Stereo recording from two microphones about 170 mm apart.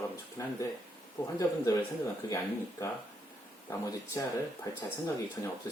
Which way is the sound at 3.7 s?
20° left (ahead or behind).